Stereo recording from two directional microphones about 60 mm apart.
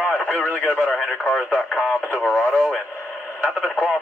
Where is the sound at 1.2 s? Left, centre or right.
Centre.